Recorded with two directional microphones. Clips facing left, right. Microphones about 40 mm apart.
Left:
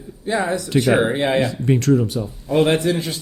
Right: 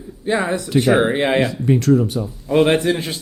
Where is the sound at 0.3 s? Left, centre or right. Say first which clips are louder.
Right 1 dB; right.